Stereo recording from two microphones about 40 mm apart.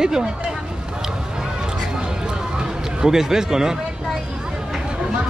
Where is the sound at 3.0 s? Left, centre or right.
Centre.